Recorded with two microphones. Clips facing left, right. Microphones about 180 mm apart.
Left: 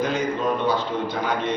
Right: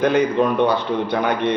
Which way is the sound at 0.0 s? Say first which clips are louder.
Right 7 dB; 65° right (ahead or behind).